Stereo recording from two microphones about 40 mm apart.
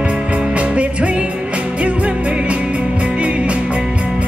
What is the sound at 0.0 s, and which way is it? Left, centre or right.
Music, right.